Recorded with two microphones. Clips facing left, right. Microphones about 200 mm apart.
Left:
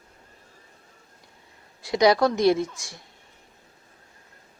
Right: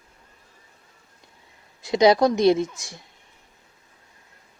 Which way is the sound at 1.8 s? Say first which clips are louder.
Right 2 dB; 25° right (ahead or behind).